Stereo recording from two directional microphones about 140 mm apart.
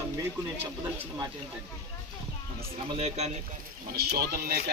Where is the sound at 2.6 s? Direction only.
45° right (ahead or behind).